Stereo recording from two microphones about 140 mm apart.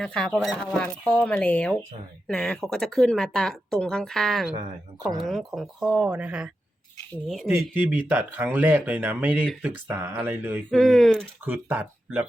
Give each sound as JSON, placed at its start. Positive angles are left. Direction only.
{"t": 0.0, "sound": "speech", "side_deg": 5}
{"t": 7.5, "sound": "speech", "side_deg": -10}
{"t": 10.7, "sound": "speech", "side_deg": 0}
{"t": 11.4, "sound": "speech", "side_deg": -10}